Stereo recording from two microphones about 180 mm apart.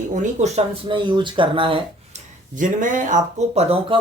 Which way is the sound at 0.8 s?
25° right (ahead or behind).